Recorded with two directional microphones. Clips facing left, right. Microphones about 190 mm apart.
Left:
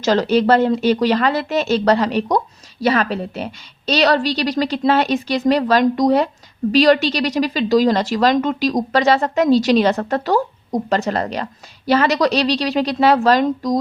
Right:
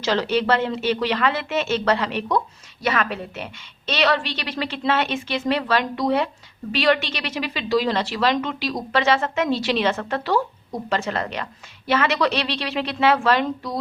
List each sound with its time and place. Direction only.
0.0 s a woman's voice: 40° left (ahead or behind)